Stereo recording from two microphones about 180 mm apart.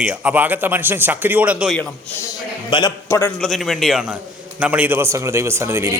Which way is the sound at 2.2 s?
25° left (ahead or behind).